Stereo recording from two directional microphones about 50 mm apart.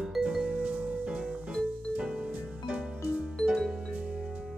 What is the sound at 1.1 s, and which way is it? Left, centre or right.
Music, centre.